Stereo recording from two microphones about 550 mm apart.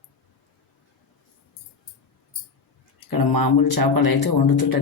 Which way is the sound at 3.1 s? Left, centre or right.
Left.